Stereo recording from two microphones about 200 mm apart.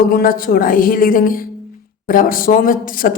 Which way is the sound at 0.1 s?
45° left (ahead or behind).